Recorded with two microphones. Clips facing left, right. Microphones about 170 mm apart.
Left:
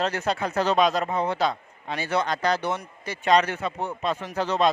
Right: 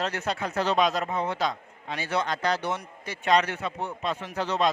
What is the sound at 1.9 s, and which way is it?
Speech, 45° left (ahead or behind).